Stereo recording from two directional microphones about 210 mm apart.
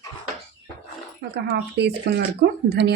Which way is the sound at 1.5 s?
55° right (ahead or behind).